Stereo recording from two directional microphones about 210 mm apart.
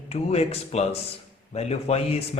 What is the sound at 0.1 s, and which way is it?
Speech, 30° left (ahead or behind).